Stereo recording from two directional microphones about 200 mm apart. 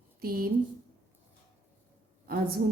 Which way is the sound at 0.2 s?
45° right (ahead or behind).